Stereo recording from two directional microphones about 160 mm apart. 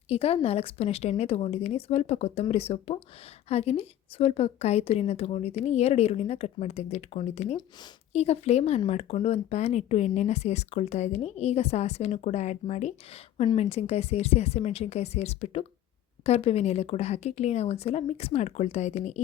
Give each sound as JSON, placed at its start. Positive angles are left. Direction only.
{"t": 0.1, "sound": "a woman's voice", "side_deg": 40}
{"t": 13.3, "sound": "a woman's voice", "side_deg": 35}